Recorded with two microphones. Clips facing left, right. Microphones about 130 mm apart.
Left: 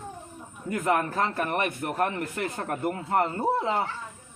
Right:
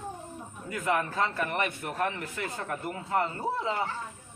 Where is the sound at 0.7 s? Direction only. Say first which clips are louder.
Left 4 dB; 45° left (ahead or behind).